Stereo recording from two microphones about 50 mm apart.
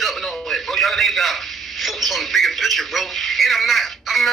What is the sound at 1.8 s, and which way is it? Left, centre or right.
Speech, centre.